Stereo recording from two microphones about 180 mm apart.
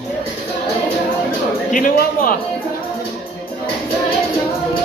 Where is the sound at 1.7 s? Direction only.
50° left (ahead or behind).